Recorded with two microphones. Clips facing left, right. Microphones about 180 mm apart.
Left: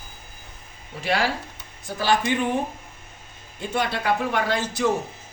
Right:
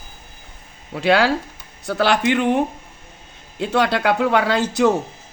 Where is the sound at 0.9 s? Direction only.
75° right (ahead or behind).